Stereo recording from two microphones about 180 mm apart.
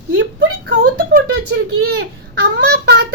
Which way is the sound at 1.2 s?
65° right (ahead or behind).